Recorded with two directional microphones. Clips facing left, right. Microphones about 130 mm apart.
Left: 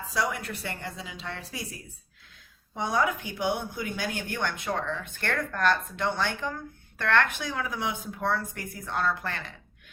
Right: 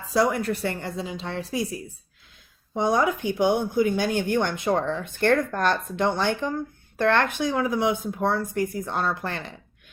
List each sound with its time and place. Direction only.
0.1 s speech: 40° right (ahead or behind)
2.9 s speech: 30° right (ahead or behind)